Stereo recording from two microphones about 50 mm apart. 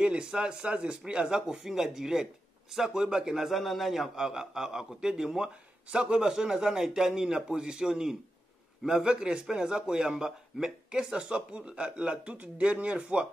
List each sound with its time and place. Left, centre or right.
0.0 s a man's voice: centre
3.4 s a man's voice: centre; by 13.3 s right